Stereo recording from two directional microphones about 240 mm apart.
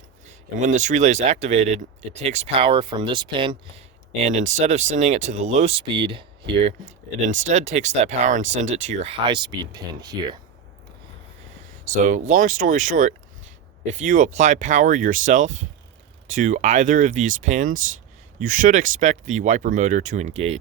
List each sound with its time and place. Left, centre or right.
0.6 s speech: right
4.2 s speech: right
11.9 s speech: right